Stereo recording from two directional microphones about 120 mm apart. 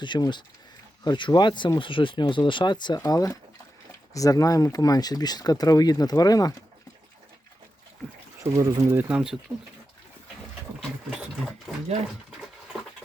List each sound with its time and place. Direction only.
0.0 s speech: 40° left (ahead or behind)
8.4 s speech: 20° right (ahead or behind)
10.8 s sewing machine: 5° right (ahead or behind)